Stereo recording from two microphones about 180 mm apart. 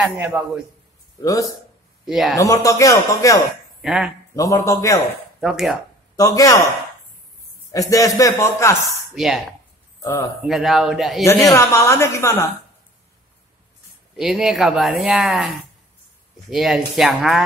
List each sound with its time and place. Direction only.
0.0 s a man's voice: 10° right (ahead or behind)
1.2 s a man's voice: 20° left (ahead or behind)
2.0 s speech: 5° right (ahead or behind)
2.3 s a man's voice: 20° left (ahead or behind)
3.8 s speech: centre (ahead or behind)
4.4 s a man's voice: 15° left (ahead or behind)
5.4 s speech: centre (ahead or behind)
6.1 s a man's voice: 20° left (ahead or behind)
7.7 s a man's voice: 20° left (ahead or behind)
8.8 s speech: centre (ahead or behind)
10.4 s speech: centre (ahead or behind)
11.5 s a man's voice: 15° left (ahead or behind)
14.1 s speech: centre (ahead or behind)